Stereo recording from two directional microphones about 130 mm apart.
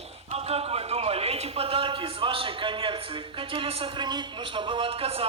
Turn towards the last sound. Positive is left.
turn(degrees=-45)  # may be behind; listen again after turning